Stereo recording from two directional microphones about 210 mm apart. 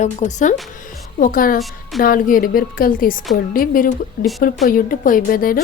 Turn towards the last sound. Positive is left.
turn(degrees=45)  # may be behind; listen again after turning